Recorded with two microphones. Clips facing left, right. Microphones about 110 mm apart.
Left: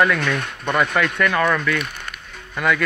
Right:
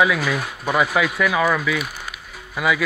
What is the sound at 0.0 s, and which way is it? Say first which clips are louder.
Speech: even; 5° right (ahead or behind).